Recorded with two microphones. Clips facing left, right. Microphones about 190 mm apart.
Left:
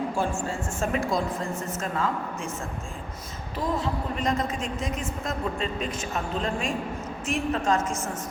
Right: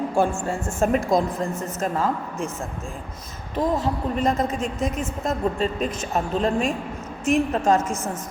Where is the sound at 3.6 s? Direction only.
45° right (ahead or behind).